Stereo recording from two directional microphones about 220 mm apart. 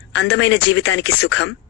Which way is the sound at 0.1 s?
60° left (ahead or behind).